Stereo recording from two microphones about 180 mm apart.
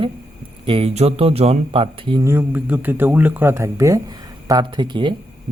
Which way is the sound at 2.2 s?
10° right (ahead or behind).